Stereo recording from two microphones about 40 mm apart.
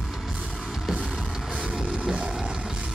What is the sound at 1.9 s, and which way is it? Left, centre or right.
Music, centre.